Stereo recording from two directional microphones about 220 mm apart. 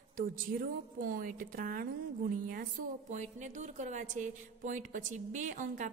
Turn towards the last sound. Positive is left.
turn(degrees=-35)  # may be behind; listen again after turning